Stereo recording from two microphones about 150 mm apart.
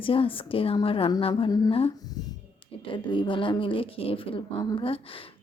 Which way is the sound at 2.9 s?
35° left (ahead or behind).